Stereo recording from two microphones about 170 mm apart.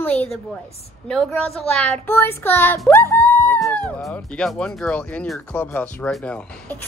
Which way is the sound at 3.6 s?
5° left (ahead or behind).